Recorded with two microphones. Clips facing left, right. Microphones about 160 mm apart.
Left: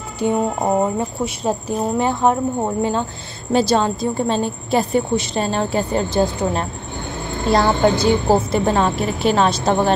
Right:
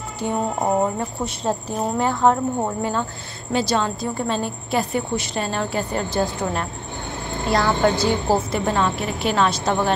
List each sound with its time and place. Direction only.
0.2 s a woman's voice: 15° left (ahead or behind)
7.9 s a woman's voice: 15° left (ahead or behind)
8.5 s a woman's voice: 30° left (ahead or behind)